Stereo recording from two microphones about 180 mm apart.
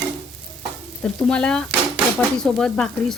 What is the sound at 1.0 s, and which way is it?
Frying, 5° left (ahead or behind).